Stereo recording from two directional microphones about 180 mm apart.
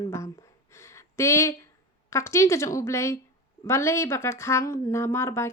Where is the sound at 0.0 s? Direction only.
20° left (ahead or behind).